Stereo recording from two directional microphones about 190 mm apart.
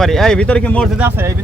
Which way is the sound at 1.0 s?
10° right (ahead or behind).